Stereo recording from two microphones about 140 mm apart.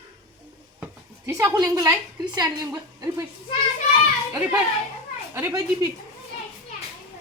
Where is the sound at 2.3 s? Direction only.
30° right (ahead or behind).